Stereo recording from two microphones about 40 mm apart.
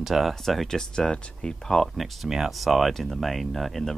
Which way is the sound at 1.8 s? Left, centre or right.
Centre.